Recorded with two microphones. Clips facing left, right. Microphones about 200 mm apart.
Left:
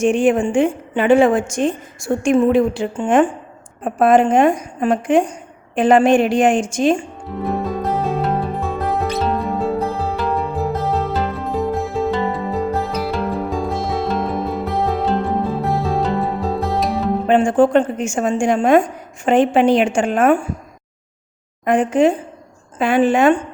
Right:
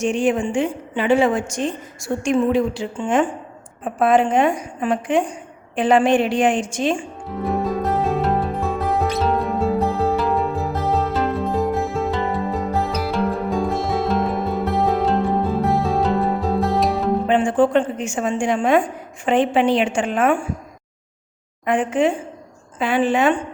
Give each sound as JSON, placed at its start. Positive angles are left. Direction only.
{"t": 0.0, "sound": "a woman's voice", "side_deg": 55}
{"t": 7.4, "sound": "music", "side_deg": 0}
{"t": 17.2, "sound": "a woman's voice", "side_deg": 45}
{"t": 21.6, "sound": "a woman's voice", "side_deg": 40}